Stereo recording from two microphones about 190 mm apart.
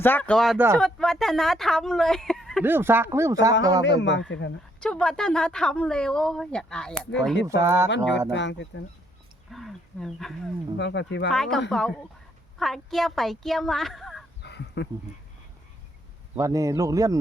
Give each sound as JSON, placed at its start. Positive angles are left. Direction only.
{"t": 0.0, "sound": "speech", "side_deg": 10}
{"t": 2.6, "sound": "a man's voice", "side_deg": -10}
{"t": 4.0, "sound": "speech", "side_deg": 70}
{"t": 4.8, "sound": "speech", "side_deg": 5}
{"t": 7.4, "sound": "speech", "side_deg": -15}
{"t": 7.9, "sound": "speech", "side_deg": 70}
{"t": 9.5, "sound": "speech", "side_deg": 0}
{"t": 10.8, "sound": "speech", "side_deg": 70}
{"t": 11.3, "sound": "speech", "side_deg": 0}
{"t": 14.4, "sound": "a sound", "side_deg": 65}
{"t": 16.3, "sound": "speech", "side_deg": -15}